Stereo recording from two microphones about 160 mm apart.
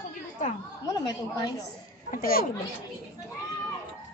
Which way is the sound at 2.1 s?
65° left (ahead or behind).